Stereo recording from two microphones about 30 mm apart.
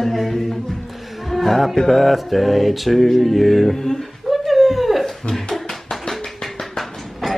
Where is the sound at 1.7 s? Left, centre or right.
Centre.